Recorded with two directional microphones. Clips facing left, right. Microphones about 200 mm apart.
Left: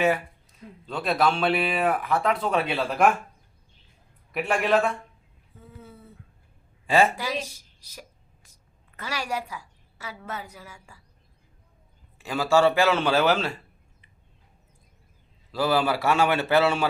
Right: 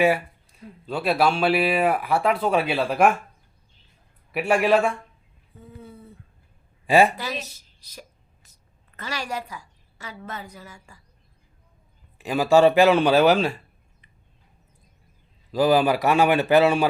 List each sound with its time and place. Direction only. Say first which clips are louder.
0.9 s speech: right 2 dB; 10° right (ahead or behind)
4.3 s speech: right 4 dB; 10° right (ahead or behind)
6.8 s speech: right 3 dB; 15° right (ahead or behind)
7.2 s speech: left 1 dB; 10° left (ahead or behind)
8.4 s a sound: left 1 dB; 10° left (ahead or behind)
9.0 s a woman's voice: even; 10° left (ahead or behind)
12.1 s speech: right 4 dB; 15° right (ahead or behind)
15.5 s speech: right 5 dB; 15° right (ahead or behind)